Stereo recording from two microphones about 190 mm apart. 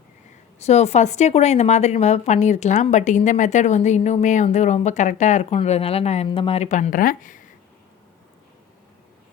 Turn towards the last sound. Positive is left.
turn(degrees=45)  # may be behind; listen again after turning